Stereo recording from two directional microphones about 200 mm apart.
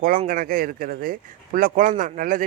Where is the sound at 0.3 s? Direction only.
45° right (ahead or behind).